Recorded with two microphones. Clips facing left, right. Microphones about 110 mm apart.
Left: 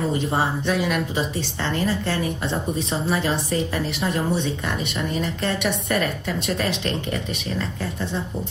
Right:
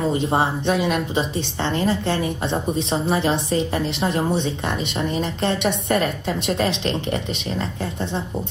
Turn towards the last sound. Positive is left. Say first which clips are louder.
# right 1 dB
turn(degrees=-20)  # may be behind; listen again after turning